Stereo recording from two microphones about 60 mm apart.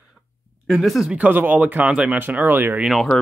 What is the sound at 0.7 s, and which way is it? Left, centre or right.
Speech, centre.